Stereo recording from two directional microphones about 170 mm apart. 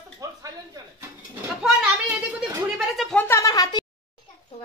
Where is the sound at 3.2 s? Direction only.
15° left (ahead or behind).